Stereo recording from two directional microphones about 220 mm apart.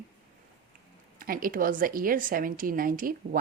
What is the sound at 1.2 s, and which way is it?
Speech, 40° right (ahead or behind).